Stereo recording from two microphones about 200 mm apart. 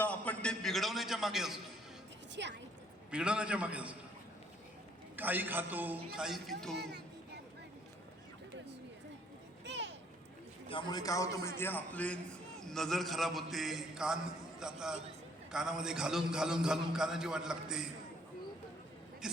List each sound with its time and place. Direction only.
0.0 s a sound: 5° left (ahead or behind)
2.3 s a woman's voice: 60° right (ahead or behind)
3.1 s a man's voice: 5° right (ahead or behind)
5.1 s a man's voice: 10° right (ahead or behind)
9.6 s a sound: 60° right (ahead or behind)
10.7 s a man's voice: 25° left (ahead or behind); by 17.8 s 5° right (ahead or behind)
19.2 s speech: 5° right (ahead or behind)